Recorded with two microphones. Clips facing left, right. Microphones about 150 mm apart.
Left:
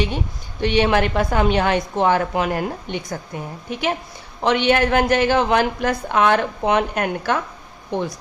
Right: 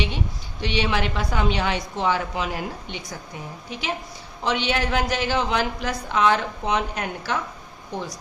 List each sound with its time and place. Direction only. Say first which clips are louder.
0.6 s a woman's voice: left 7 dB; 50° left (ahead or behind)